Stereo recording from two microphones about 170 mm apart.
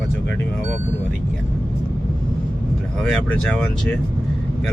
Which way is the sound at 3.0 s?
5° left (ahead or behind).